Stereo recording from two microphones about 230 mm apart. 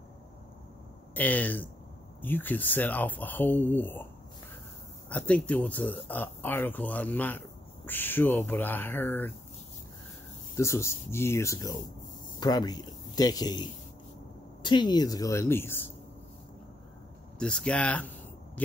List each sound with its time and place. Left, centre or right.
1.1 s speech: centre
5.1 s speech: centre
10.5 s speech: centre
17.4 s speech: centre